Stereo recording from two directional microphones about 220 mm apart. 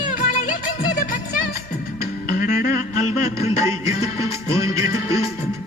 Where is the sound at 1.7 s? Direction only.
40° left (ahead or behind).